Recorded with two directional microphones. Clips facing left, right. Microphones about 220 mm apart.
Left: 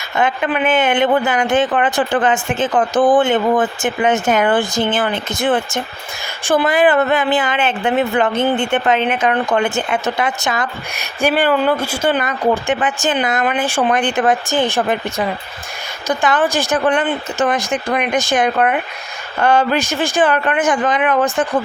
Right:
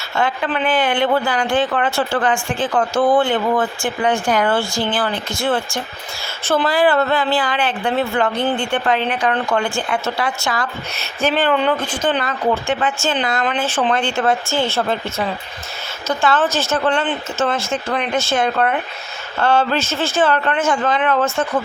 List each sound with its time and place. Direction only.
0.2 s a woman's voice: 15° left (ahead or behind)